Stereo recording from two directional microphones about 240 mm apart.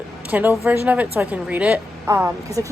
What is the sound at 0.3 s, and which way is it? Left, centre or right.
A woman's voice, centre.